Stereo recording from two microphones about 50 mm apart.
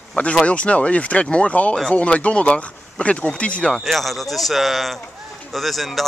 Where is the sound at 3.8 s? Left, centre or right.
Centre.